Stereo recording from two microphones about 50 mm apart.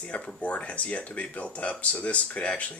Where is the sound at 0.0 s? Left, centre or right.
Left.